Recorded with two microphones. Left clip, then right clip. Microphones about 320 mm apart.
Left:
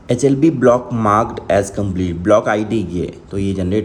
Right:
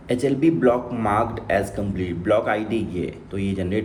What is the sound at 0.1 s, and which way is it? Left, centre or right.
Speech, centre.